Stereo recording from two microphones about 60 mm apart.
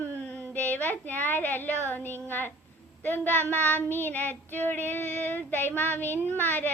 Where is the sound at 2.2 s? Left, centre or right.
Left.